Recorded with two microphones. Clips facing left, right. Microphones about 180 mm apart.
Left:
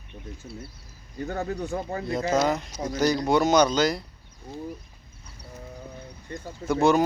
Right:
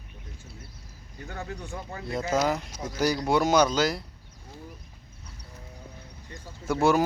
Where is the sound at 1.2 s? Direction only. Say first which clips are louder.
Left 8 dB; 40° left (ahead or behind).